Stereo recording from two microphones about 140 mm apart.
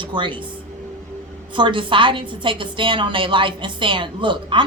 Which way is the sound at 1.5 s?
35° right (ahead or behind).